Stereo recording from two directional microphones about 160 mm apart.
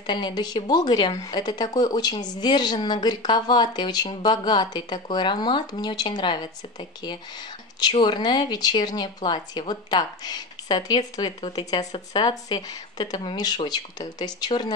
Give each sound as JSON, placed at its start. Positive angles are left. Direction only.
{"t": 0.0, "sound": "speech", "side_deg": 30}